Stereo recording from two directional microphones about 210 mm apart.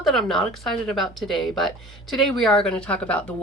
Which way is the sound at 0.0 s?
Centre (ahead or behind).